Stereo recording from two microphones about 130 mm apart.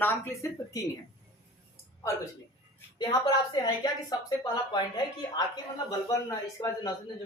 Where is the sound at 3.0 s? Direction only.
30° left (ahead or behind).